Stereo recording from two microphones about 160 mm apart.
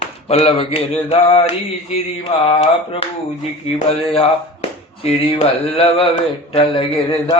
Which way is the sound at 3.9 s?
40° left (ahead or behind).